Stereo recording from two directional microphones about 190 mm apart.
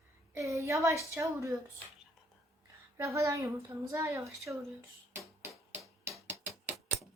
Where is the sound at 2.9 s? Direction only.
15° right (ahead or behind).